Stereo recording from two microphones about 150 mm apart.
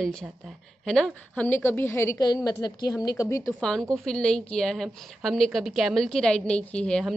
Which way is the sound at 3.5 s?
5° left (ahead or behind).